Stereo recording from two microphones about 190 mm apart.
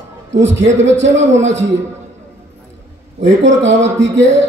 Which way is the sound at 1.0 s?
75° right (ahead or behind).